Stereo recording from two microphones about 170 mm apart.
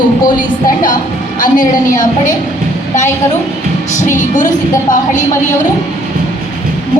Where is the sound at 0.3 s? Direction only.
55° left (ahead or behind).